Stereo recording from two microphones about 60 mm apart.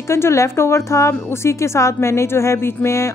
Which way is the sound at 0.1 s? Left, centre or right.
Left.